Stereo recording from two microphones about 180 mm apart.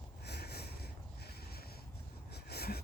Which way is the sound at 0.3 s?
65° left (ahead or behind).